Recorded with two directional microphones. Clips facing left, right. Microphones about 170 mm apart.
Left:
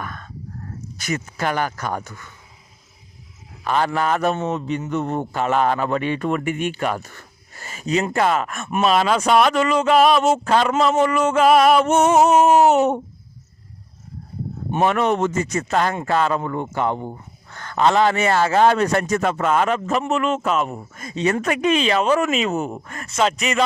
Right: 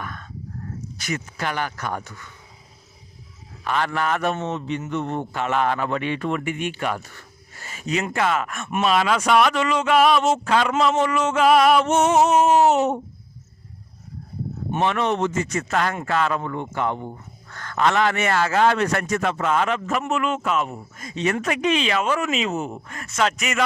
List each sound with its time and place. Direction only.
0.0 s a sound: 45° left (ahead or behind)
0.9 s speech: 45° left (ahead or behind)
3.6 s a man's voice: 35° left (ahead or behind)
11.1 s a sound: 55° left (ahead or behind)
14.7 s a man's voice: 45° left (ahead or behind)
21.2 s a man's voice: 35° left (ahead or behind)
21.5 s speech: 45° left (ahead or behind)
23.0 s speech: 25° left (ahead or behind)